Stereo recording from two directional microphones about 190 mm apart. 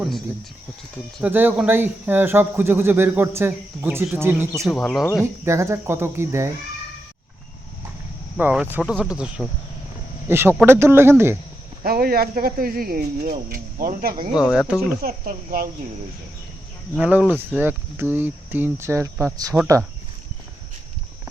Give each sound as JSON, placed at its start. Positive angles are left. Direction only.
{"t": 1.2, "sound": "speech", "side_deg": -10}
{"t": 4.6, "sound": "speech", "side_deg": 5}
{"t": 5.2, "sound": "speech", "side_deg": -15}
{"t": 8.4, "sound": "speech", "side_deg": -10}
{"t": 11.8, "sound": "speech", "side_deg": -50}
{"t": 14.5, "sound": "speech", "side_deg": -5}
{"t": 15.0, "sound": "speech", "side_deg": -45}
{"t": 17.0, "sound": "speech", "side_deg": -5}